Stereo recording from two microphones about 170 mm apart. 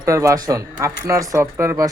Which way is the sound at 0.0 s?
20° right (ahead or behind).